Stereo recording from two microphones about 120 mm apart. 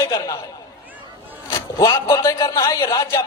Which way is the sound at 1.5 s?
30° left (ahead or behind).